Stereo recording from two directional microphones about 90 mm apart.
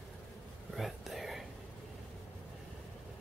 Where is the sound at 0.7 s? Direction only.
Centre (ahead or behind).